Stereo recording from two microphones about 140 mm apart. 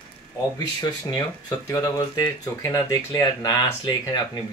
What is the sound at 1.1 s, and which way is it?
Speech, 30° left (ahead or behind).